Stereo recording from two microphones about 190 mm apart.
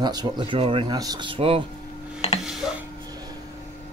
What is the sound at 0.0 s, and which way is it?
Speech, 20° right (ahead or behind).